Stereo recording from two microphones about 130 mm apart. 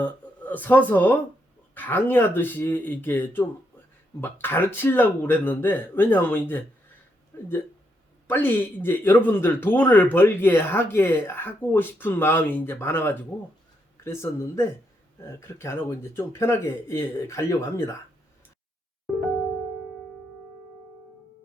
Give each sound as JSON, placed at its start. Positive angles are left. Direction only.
{"t": 0.0, "sound": "speech", "side_deg": 15}